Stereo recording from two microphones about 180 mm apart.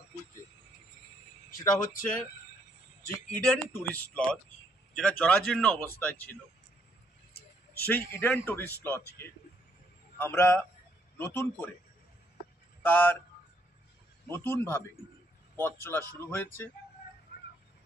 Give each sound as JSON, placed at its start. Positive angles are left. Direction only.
{"t": 1.6, "sound": "speech", "side_deg": 15}
{"t": 3.3, "sound": "speech", "side_deg": 10}
{"t": 7.8, "sound": "speech", "side_deg": 10}
{"t": 10.1, "sound": "a man's voice", "side_deg": 15}
{"t": 12.8, "sound": "speech", "side_deg": 10}
{"t": 14.2, "sound": "speech", "side_deg": 15}